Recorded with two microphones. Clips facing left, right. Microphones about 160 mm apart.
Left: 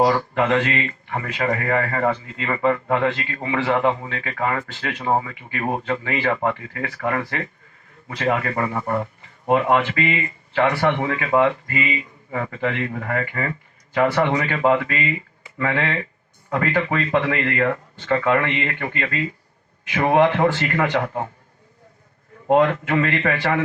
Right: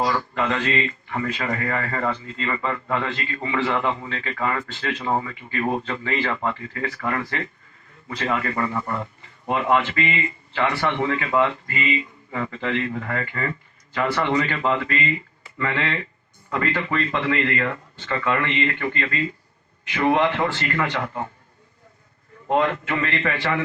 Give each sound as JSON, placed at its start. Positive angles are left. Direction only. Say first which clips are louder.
{"t": 0.0, "sound": "a man's voice", "louder": "left 5 dB", "side_deg": 60}
{"t": 9.5, "sound": "speech", "louder": "left 3 dB", "side_deg": 50}
{"t": 22.4, "sound": "speech", "louder": "left 4 dB", "side_deg": 55}